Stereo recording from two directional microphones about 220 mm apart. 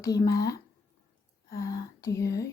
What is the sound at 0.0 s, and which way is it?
Speech, 15° left (ahead or behind).